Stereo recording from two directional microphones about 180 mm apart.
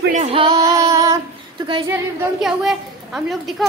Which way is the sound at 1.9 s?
5° right (ahead or behind).